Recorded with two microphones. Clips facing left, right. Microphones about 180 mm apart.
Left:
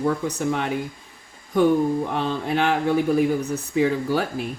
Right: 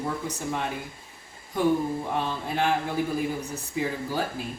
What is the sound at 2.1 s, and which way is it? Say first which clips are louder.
Speech: left 5 dB; 70° left (ahead or behind).